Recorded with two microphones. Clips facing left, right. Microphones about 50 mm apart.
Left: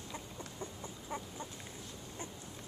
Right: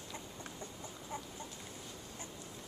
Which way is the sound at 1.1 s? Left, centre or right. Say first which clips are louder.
Left 2 dB; left.